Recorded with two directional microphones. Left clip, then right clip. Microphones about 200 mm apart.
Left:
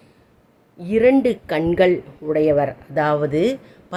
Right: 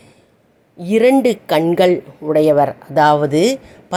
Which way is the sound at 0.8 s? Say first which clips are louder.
Right 3 dB; 15° right (ahead or behind).